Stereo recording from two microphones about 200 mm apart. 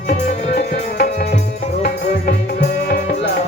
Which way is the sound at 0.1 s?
55° left (ahead or behind).